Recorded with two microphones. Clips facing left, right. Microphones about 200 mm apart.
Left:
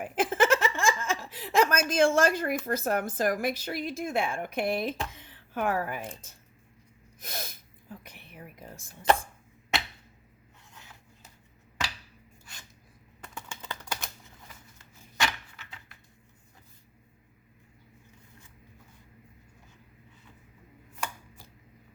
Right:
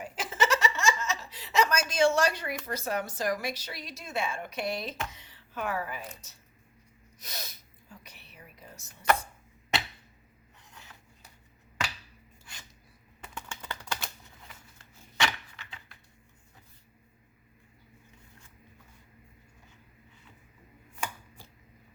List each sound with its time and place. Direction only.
0.0 s chuckle: 55° left (ahead or behind)
2.6 s a woman's voice: 50° left (ahead or behind)
7.2 s a sound: 50° left (ahead or behind)
13.6 s typing: 15° left (ahead or behind)